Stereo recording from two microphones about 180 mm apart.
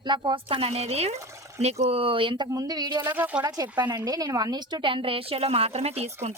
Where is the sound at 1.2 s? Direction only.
15° right (ahead or behind).